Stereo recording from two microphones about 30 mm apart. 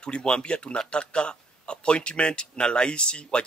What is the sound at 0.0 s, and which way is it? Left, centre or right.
A man's voice, left.